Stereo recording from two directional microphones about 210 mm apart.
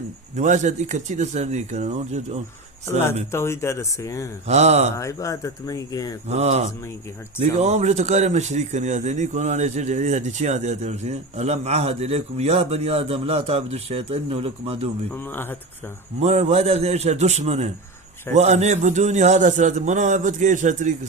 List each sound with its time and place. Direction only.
0.3 s speech: 35° right (ahead or behind)
3.3 s speech: 10° left (ahead or behind)
4.4 s speech: 30° right (ahead or behind)
4.9 s speech: 15° left (ahead or behind)
6.2 s speech: 30° right (ahead or behind)
15.2 s speech: 10° left (ahead or behind)
16.2 s speech: 30° right (ahead or behind)